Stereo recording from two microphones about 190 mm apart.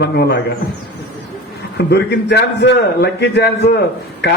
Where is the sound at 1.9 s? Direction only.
65° left (ahead or behind).